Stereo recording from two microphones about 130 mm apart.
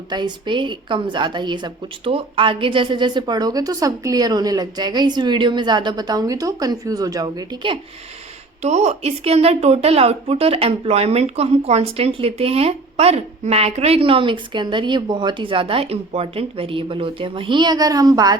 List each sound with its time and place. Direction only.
0.1 s a woman's voice: 35° right (ahead or behind)
8.6 s a woman's voice: 60° right (ahead or behind); by 18.3 s 30° right (ahead or behind)